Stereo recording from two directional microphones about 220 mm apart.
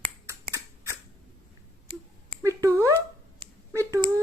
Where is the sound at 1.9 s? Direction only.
20° right (ahead or behind).